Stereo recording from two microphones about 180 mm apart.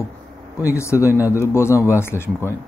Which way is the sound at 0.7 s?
15° left (ahead or behind).